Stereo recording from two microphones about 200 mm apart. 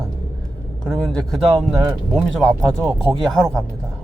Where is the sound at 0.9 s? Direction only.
5° left (ahead or behind).